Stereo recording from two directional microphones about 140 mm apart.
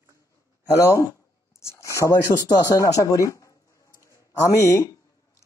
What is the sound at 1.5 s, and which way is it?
Speech, 20° left (ahead or behind).